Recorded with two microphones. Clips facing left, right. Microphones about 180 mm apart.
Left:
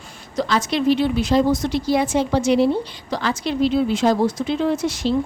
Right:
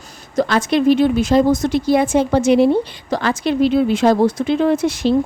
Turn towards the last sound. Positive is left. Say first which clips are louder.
# right 5 dB
turn(degrees=-55)  # may be behind; listen again after turning